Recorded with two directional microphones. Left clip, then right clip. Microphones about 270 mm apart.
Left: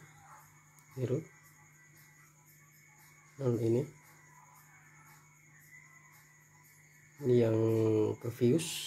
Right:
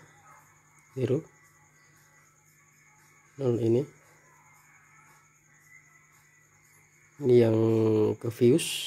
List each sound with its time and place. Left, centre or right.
0.9 s speech: right
3.3 s speech: right
7.2 s speech: right